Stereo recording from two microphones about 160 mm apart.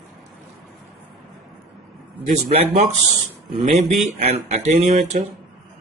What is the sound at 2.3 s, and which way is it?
Speech, 40° right (ahead or behind).